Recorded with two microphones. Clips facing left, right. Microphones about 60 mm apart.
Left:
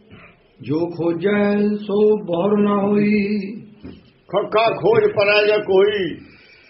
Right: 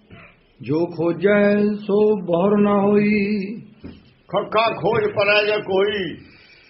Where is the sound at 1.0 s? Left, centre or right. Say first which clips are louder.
Right 3 dB; right.